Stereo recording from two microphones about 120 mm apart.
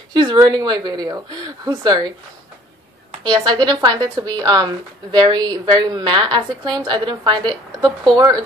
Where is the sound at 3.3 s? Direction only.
35° right (ahead or behind).